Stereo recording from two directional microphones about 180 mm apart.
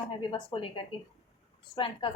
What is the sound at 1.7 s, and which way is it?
Speech, 25° left (ahead or behind).